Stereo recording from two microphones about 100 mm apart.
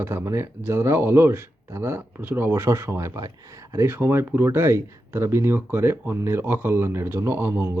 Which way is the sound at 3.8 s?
25° right (ahead or behind).